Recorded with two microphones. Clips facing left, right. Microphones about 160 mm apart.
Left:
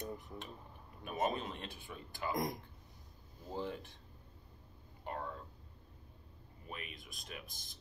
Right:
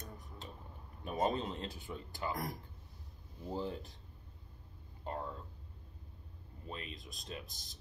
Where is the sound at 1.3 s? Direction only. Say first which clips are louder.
Right 3 dB; 25° right (ahead or behind).